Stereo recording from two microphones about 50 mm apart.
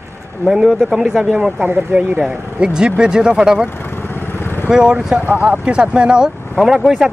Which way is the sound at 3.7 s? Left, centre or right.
Left.